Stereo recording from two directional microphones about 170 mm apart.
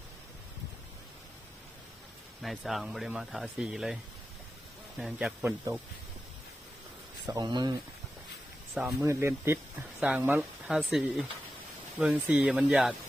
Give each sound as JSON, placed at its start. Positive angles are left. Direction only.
{"t": 2.4, "sound": "speech", "side_deg": 0}
{"t": 4.9, "sound": "speech", "side_deg": -5}
{"t": 7.3, "sound": "speech", "side_deg": -25}
{"t": 8.9, "sound": "speech", "side_deg": -15}